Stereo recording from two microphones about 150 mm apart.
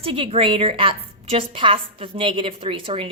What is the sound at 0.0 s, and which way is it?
A woman's voice, 35° right (ahead or behind).